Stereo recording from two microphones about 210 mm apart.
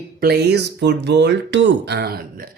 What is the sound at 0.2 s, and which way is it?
Speech, 50° right (ahead or behind).